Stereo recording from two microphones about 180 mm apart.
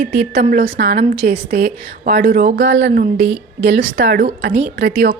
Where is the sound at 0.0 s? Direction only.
65° right (ahead or behind).